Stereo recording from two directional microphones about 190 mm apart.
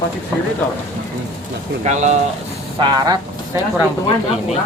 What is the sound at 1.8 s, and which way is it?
Speech, 40° right (ahead or behind).